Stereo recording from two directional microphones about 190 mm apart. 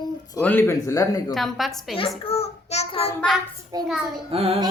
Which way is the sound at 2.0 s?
30° left (ahead or behind).